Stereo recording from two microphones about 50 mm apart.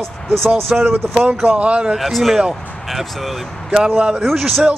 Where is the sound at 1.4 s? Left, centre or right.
Right.